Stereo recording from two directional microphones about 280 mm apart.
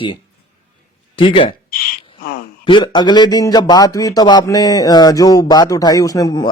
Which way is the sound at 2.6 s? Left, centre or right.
Centre.